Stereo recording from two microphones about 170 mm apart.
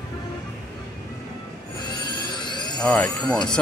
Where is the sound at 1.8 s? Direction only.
25° left (ahead or behind).